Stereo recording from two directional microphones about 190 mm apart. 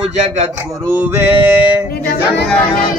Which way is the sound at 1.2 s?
10° right (ahead or behind).